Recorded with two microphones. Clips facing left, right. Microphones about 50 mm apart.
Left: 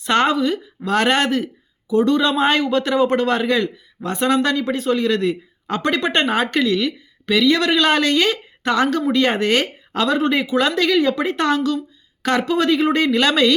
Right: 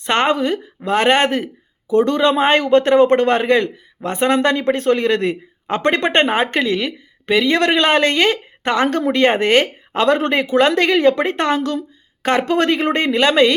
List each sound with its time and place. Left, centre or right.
0.0 s speech: right
0.3 s a woman's voice: right
0.9 s speech: right
12.5 s speech: right